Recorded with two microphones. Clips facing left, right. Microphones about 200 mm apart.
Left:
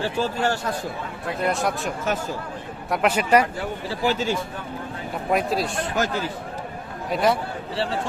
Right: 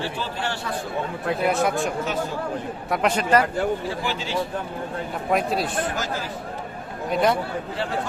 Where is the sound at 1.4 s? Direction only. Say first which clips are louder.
Right 2 dB; centre (ahead or behind).